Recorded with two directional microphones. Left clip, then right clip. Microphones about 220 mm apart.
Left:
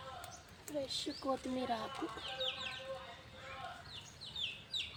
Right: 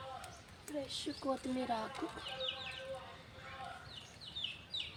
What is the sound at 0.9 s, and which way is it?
Speech, 5° right (ahead or behind).